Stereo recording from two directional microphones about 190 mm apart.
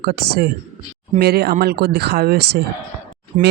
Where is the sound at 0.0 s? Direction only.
55° right (ahead or behind).